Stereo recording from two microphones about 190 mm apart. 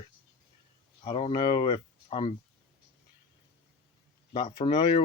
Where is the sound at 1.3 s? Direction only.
20° left (ahead or behind).